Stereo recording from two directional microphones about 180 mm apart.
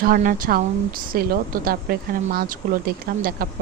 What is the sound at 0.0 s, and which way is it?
Speech, 50° right (ahead or behind).